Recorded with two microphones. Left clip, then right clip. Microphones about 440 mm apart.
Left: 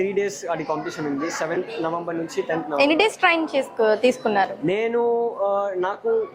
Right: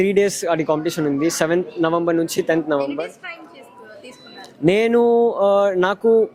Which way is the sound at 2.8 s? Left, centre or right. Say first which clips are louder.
Left 7 dB; left.